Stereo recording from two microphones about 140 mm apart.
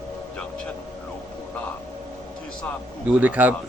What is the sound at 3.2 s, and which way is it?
Speech, 10° right (ahead or behind).